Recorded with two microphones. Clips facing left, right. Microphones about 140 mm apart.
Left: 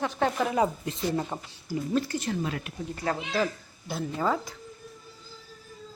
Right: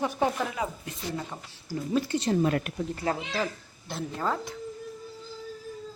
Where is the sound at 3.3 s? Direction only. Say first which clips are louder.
Left 3 dB; centre (ahead or behind).